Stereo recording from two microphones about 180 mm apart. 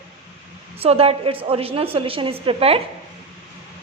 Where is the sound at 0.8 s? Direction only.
35° right (ahead or behind).